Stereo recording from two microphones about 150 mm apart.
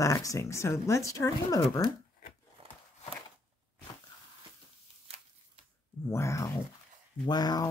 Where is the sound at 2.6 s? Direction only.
40° right (ahead or behind).